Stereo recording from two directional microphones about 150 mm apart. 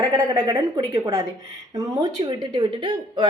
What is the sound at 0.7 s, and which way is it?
A woman's voice, 30° right (ahead or behind).